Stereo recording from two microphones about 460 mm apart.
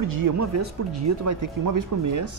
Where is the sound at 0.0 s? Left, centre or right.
Right.